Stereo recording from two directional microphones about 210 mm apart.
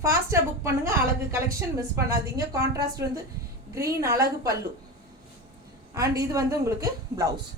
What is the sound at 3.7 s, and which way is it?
Speech, 15° right (ahead or behind).